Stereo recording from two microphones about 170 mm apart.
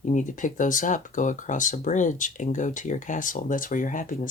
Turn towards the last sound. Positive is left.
turn(degrees=50)  # may be behind; listen again after turning